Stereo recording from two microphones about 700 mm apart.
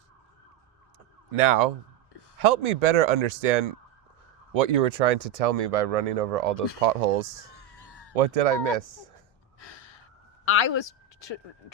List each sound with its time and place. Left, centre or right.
1.3 s speech: right
7.5 s a sound: left
8.1 s speech: right
9.6 s gasp: left